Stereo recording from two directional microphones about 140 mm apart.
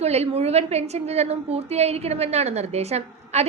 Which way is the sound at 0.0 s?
50° right (ahead or behind).